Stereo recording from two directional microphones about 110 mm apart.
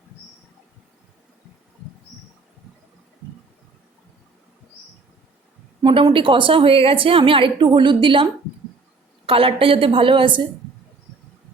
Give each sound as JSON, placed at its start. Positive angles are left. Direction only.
{"t": 5.8, "sound": "a woman's voice", "side_deg": -50}